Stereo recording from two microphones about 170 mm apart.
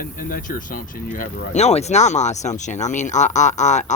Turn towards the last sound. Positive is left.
turn(degrees=45)  # may be behind; listen again after turning